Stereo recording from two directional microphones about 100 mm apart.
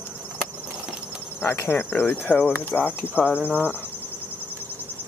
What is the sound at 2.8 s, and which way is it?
Cricket, 20° left (ahead or behind).